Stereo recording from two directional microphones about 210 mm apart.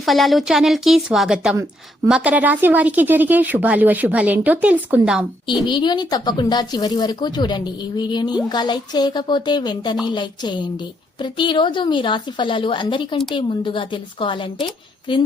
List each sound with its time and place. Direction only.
0.0 s a woman's voice: centre (ahead or behind)
5.6 s speech: 20° left (ahead or behind)